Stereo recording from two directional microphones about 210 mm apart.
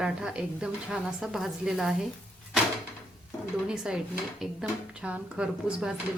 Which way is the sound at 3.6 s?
5° right (ahead or behind).